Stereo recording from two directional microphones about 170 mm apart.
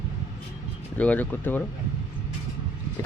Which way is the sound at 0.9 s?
10° left (ahead or behind).